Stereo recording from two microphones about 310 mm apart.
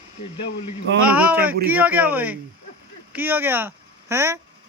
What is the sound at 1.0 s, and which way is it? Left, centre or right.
Speech, centre.